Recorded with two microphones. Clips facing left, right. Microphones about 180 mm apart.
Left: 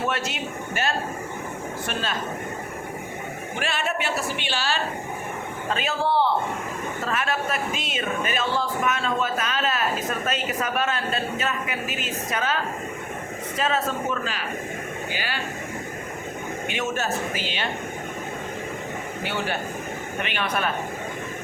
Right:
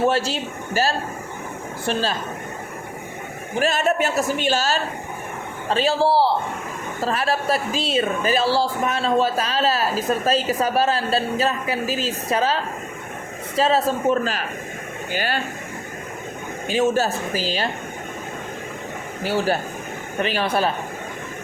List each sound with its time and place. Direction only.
0.0 s speech: 30° right (ahead or behind)
3.5 s speech: 40° right (ahead or behind)
5.6 s speech: 30° right (ahead or behind)
13.6 s speech: 30° right (ahead or behind); by 15.4 s 45° right (ahead or behind)
16.6 s speech: 35° right (ahead or behind)
19.2 s speech: 35° right (ahead or behind)